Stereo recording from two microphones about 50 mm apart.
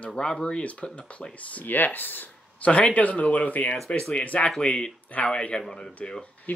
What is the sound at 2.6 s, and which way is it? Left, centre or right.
Speech, left.